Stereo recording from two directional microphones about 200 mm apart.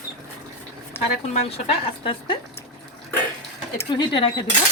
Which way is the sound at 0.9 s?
10° left (ahead or behind).